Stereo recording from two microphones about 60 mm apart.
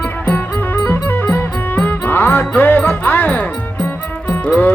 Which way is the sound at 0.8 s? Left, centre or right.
Left.